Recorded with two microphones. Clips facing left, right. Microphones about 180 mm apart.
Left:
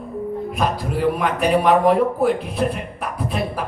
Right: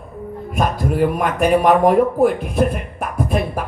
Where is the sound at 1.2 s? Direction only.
45° right (ahead or behind).